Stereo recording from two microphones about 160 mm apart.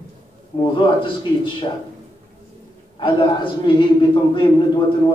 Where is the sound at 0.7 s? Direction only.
30° left (ahead or behind).